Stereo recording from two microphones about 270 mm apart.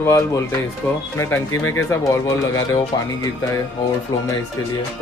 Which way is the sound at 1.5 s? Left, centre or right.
Left.